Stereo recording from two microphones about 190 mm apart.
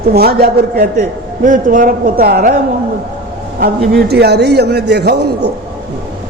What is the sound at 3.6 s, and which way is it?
A man's voice, 55° right (ahead or behind).